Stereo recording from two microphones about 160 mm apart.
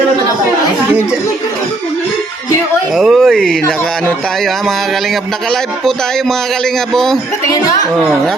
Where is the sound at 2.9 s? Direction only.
Centre (ahead or behind).